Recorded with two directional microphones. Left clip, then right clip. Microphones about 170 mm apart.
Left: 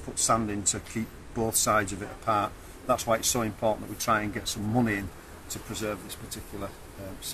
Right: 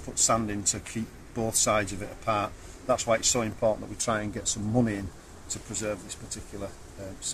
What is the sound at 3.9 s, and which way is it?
Speech, 50° right (ahead or behind).